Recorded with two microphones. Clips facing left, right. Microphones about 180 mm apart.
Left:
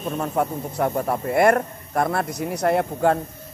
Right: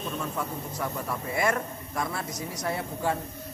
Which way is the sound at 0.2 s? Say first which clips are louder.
Left 9 dB; 60° left (ahead or behind).